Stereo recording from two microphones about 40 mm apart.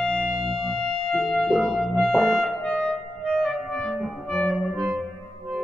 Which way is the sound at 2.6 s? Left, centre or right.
Left.